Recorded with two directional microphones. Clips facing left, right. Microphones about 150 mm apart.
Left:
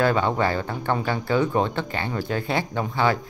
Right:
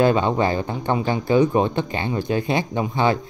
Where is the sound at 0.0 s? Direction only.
20° right (ahead or behind).